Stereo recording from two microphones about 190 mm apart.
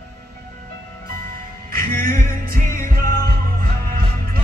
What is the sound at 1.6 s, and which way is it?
Music, 50° right (ahead or behind).